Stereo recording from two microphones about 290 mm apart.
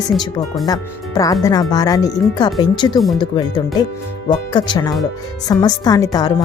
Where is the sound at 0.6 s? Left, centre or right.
Centre.